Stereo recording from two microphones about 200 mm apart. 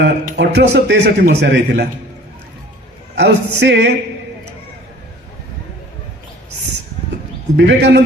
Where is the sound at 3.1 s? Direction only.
60° right (ahead or behind).